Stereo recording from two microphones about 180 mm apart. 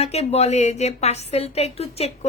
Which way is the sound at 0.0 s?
35° left (ahead or behind).